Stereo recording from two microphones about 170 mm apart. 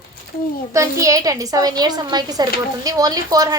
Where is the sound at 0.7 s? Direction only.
20° right (ahead or behind).